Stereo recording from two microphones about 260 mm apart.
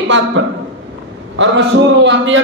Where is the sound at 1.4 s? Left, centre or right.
Right.